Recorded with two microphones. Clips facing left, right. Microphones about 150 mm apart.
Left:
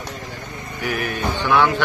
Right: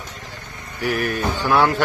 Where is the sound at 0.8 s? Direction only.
45° right (ahead or behind).